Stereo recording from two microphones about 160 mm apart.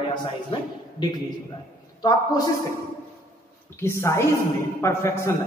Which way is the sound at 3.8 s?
15° left (ahead or behind).